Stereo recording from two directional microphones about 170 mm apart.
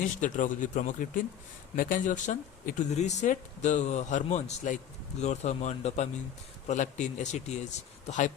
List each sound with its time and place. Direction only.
0.0 s speech: 50° left (ahead or behind)